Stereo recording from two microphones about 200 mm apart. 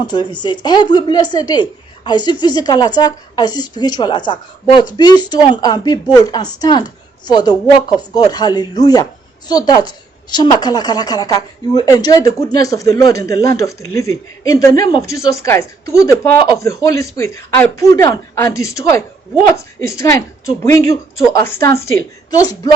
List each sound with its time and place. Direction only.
0.0 s a woman's voice: 20° left (ahead or behind)